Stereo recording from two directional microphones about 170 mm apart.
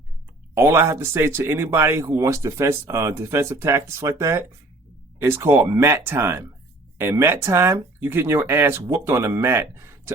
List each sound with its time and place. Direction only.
0.5 s speech: 15° right (ahead or behind)